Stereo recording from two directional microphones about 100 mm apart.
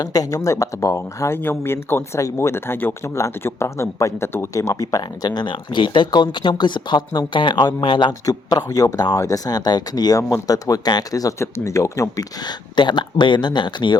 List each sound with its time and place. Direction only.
0.0 s speech: 35° left (ahead or behind); by 8.1 s 55° left (ahead or behind)
8.2 s speech: 40° left (ahead or behind)
12.4 s speech: 50° left (ahead or behind)